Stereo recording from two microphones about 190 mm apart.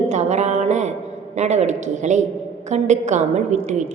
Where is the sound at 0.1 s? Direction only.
35° right (ahead or behind).